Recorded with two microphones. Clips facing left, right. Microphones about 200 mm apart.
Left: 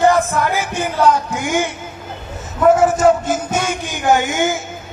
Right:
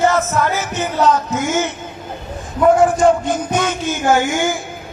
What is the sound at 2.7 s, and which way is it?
Speech, 5° left (ahead or behind).